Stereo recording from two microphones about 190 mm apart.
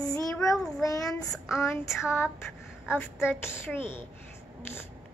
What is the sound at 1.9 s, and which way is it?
Speech, centre (ahead or behind).